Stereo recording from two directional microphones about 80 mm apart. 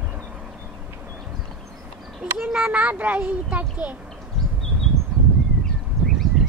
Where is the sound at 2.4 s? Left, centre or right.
Centre.